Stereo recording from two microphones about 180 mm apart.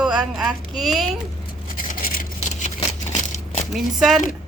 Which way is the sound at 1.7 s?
50° left (ahead or behind).